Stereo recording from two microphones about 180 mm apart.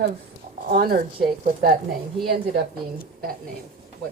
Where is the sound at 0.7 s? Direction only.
55° right (ahead or behind).